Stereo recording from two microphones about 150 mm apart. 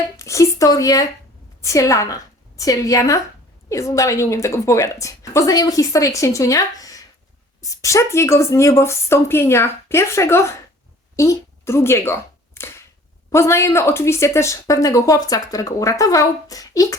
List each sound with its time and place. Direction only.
0.2 s a woman's voice: 20° left (ahead or behind)